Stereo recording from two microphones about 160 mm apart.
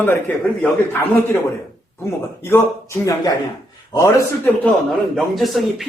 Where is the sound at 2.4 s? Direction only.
15° left (ahead or behind).